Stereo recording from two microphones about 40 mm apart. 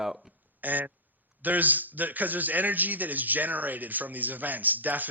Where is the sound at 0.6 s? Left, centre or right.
Right.